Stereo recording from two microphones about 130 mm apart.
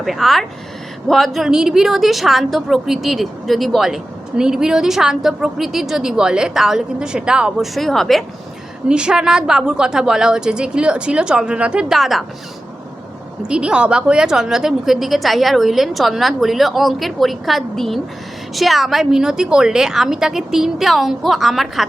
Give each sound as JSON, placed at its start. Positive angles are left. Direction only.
{"t": 0.0, "sound": "a woman's voice", "side_deg": 0}
{"t": 13.5, "sound": "a woman's voice", "side_deg": -5}